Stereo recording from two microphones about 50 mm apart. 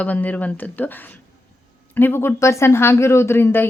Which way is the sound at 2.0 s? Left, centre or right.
Left.